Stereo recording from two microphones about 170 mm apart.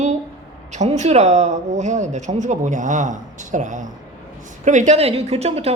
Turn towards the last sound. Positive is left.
turn(degrees=-35)  # may be behind; listen again after turning